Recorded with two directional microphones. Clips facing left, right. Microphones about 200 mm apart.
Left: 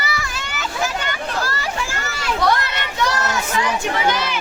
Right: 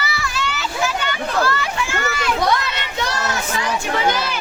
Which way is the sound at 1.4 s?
40° left (ahead or behind).